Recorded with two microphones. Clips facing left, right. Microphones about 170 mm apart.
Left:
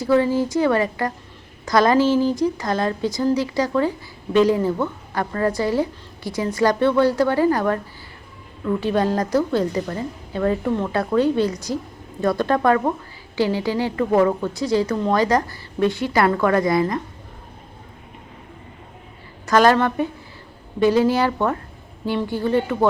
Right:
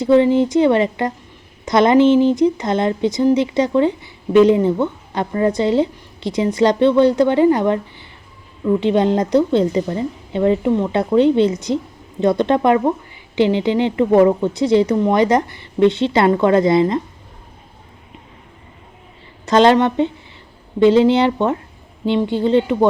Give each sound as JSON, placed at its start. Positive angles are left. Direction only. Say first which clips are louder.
{"t": 0.0, "sound": "speech", "louder": "right 5 dB", "side_deg": -20}
{"t": 19.5, "sound": "speech", "louder": "right 4 dB", "side_deg": -25}